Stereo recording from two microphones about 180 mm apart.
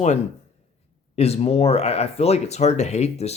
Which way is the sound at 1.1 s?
35° left (ahead or behind).